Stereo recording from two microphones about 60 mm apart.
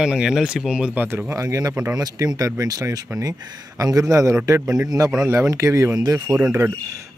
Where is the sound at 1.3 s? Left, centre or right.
Right.